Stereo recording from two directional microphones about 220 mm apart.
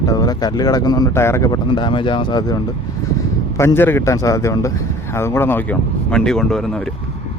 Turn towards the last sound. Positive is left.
turn(degrees=0)  # may be behind; listen again after turning